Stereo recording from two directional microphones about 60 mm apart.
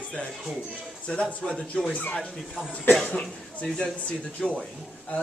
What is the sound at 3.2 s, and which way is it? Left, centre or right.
Speech, centre.